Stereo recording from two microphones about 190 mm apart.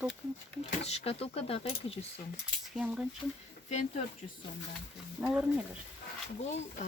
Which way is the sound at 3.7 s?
40° left (ahead or behind).